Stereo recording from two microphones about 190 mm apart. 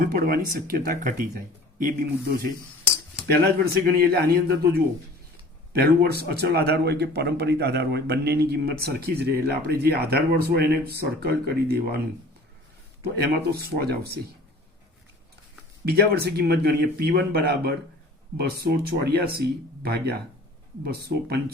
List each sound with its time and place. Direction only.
0.0 s a man's voice: 50° right (ahead or behind)
13.0 s a man's voice: 60° right (ahead or behind)
15.9 s a man's voice: 55° right (ahead or behind)